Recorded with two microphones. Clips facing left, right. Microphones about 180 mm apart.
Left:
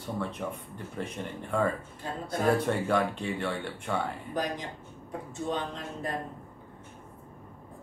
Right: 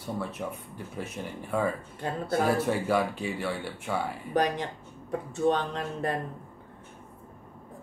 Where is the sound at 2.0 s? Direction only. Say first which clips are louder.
Right 5 dB; 65° right (ahead or behind).